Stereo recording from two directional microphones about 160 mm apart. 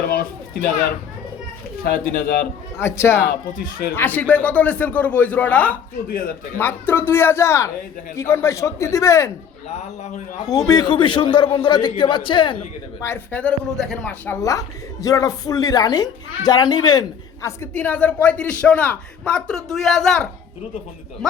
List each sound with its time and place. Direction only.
0.1 s a sound: 75° left (ahead or behind)
1.8 s speech: 65° left (ahead or behind)
2.7 s a man's voice: 15° left (ahead or behind)
6.1 s speech: 65° left (ahead or behind)
6.6 s a man's voice: 15° left (ahead or behind)
10.4 s a man's voice: 20° left (ahead or behind)
13.0 s a man's voice: 15° left (ahead or behind)
14.3 s a woman's voice: 20° left (ahead or behind); by 20.2 s 5° left (ahead or behind)